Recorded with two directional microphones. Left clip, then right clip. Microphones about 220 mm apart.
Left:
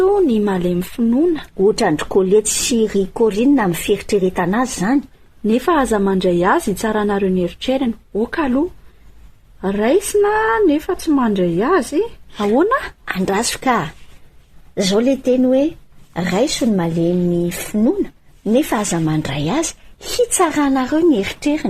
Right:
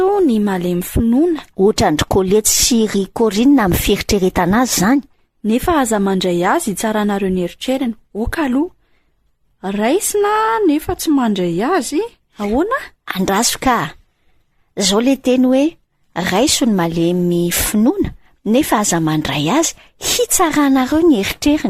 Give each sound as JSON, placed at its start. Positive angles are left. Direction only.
{"t": 0.0, "sound": "a woman's voice", "side_deg": -35}
{"t": 1.6, "sound": "a woman's voice", "side_deg": -50}
{"t": 5.5, "sound": "a woman's voice", "side_deg": -30}
{"t": 12.6, "sound": "speech", "side_deg": -10}
{"t": 13.1, "sound": "a woman's voice", "side_deg": -45}